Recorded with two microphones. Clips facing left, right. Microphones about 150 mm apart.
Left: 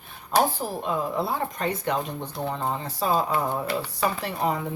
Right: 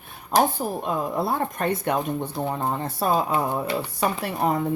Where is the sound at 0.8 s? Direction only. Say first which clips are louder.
Even; 55° right (ahead or behind).